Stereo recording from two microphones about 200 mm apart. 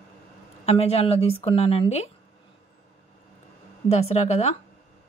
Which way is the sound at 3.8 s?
30° left (ahead or behind).